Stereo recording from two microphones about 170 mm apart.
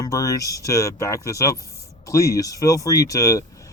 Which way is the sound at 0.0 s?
20° left (ahead or behind).